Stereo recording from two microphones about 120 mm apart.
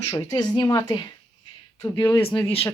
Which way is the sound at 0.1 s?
30° left (ahead or behind).